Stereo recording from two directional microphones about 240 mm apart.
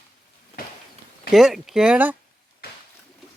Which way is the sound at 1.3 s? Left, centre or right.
Centre.